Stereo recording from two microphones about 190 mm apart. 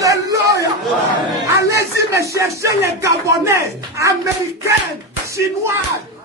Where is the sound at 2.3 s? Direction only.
15° right (ahead or behind).